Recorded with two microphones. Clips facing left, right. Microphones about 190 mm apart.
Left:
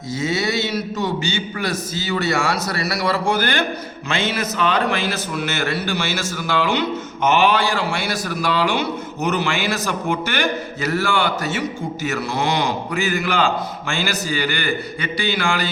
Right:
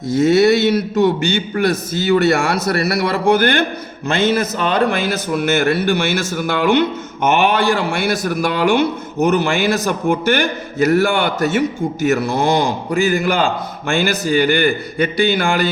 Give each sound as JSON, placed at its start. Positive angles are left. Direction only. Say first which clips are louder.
{"t": 0.1, "sound": "a man's voice", "louder": "right 10 dB", "side_deg": -60}